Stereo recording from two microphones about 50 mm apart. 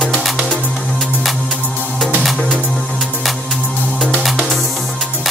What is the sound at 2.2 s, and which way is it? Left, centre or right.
Music, centre.